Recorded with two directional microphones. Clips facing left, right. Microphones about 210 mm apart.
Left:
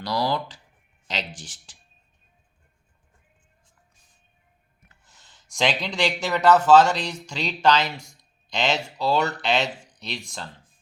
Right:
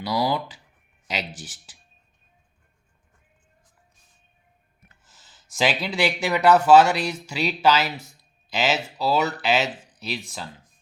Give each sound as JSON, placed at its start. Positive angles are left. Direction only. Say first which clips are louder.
{"t": 0.0, "sound": "speech", "louder": "right 1 dB", "side_deg": -5}
{"t": 5.0, "sound": "speech", "louder": "right 1 dB", "side_deg": 0}